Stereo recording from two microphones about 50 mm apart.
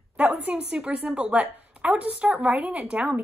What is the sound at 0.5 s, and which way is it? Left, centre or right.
Speech, right.